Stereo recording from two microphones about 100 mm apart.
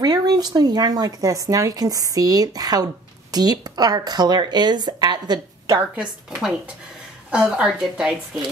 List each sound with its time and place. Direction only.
0.0 s speech: 45° right (ahead or behind)
7.2 s a woman's voice: 10° right (ahead or behind)